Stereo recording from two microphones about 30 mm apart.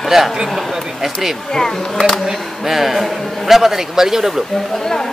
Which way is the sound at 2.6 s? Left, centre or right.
Centre.